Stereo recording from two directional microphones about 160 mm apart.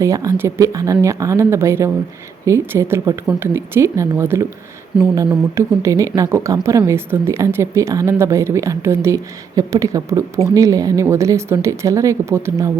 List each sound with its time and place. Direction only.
0.0 s a woman's voice: 20° right (ahead or behind)
4.9 s speech: 5° right (ahead or behind)
5.5 s a woman's voice: 20° right (ahead or behind)